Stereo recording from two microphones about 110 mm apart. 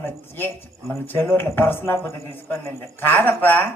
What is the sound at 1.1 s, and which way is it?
Speech, 20° left (ahead or behind).